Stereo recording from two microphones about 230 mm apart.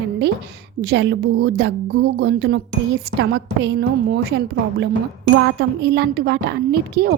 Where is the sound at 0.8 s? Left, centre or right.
Right.